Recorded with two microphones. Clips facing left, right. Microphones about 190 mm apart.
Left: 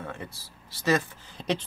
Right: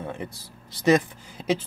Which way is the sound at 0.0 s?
20° right (ahead or behind).